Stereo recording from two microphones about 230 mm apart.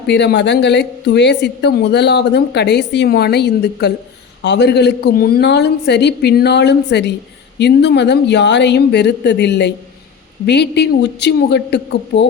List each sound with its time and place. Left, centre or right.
0.1 s a woman's voice: left